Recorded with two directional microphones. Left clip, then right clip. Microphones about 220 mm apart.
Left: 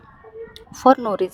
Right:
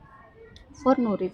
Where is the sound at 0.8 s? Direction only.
50° left (ahead or behind).